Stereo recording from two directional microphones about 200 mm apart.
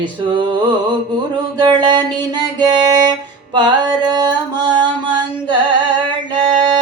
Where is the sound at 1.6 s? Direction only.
20° right (ahead or behind).